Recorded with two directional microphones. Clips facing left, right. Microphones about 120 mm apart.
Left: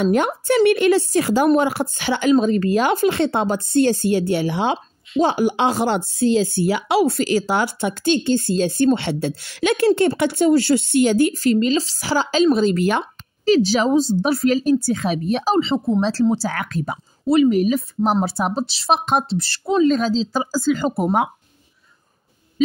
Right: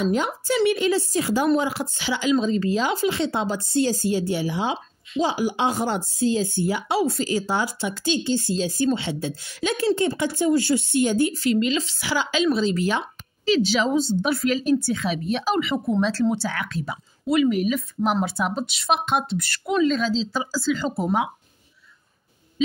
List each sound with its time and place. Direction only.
0.0 s a woman's voice: 60° left (ahead or behind)
11.3 s speech: 40° left (ahead or behind)
12.5 s a woman's voice: 55° left (ahead or behind)
13.5 s speech: 40° left (ahead or behind)
16.1 s speech: 35° left (ahead or behind)
17.3 s speech: 35° left (ahead or behind)
19.9 s speech: 45° left (ahead or behind)